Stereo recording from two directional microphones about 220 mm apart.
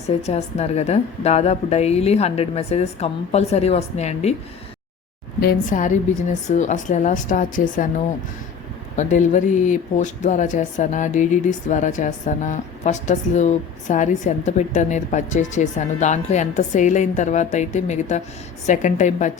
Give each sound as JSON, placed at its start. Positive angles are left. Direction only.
{"t": 0.2, "sound": "a woman's voice", "side_deg": 30}
{"t": 5.4, "sound": "a woman's voice", "side_deg": 40}
{"t": 9.0, "sound": "a woman's voice", "side_deg": 35}